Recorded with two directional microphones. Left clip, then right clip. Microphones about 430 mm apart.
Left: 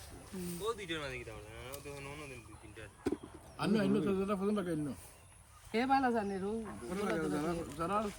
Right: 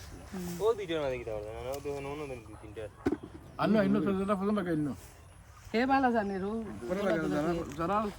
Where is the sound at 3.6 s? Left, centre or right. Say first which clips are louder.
Right 5 dB; centre.